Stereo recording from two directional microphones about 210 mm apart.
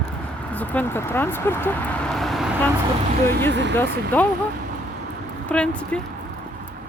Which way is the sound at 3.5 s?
55° right (ahead or behind).